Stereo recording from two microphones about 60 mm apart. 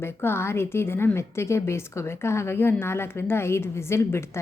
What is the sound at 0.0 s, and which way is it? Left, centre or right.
A woman's voice, left.